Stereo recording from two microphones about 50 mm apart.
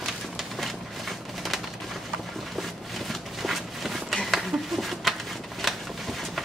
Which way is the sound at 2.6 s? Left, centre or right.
Centre.